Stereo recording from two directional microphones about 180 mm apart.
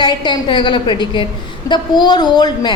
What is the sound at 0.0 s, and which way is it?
A woman's voice, 25° left (ahead or behind).